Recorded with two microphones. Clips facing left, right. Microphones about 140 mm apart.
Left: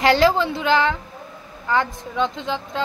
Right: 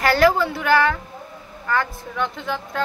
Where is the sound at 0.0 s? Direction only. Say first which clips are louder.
Even; 20° left (ahead or behind).